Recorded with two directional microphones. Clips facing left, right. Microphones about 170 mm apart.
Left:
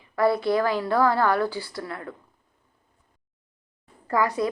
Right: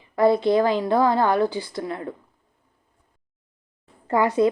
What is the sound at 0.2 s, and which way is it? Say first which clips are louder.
A woman's voice: right 4 dB; 20° right (ahead or behind).